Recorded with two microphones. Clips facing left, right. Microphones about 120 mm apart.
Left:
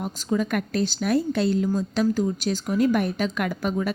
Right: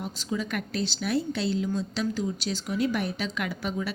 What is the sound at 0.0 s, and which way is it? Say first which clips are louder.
Speech: left 6 dB; 50° left (ahead or behind).